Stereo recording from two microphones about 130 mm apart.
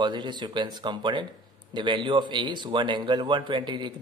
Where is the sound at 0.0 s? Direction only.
35° right (ahead or behind).